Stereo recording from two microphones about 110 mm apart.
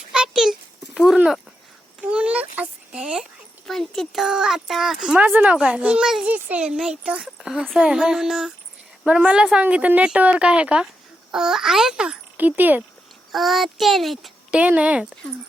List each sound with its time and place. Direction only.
0.1 s a sound: 5° right (ahead or behind)
0.9 s speech: 5° right (ahead or behind)
2.0 s a sound: 10° right (ahead or behind)
3.7 s a woman's voice: centre (ahead or behind); by 12.8 s 15° right (ahead or behind)
13.3 s speech: centre (ahead or behind)
14.5 s a woman's voice: 10° right (ahead or behind)